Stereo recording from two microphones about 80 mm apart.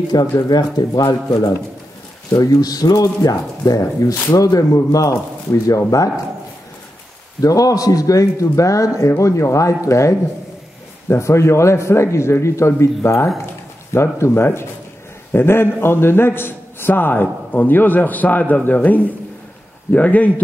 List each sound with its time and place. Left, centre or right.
0.1 s a man's voice: left
2.3 s a man's voice: left
7.4 s a man's voice: left; by 20.4 s centre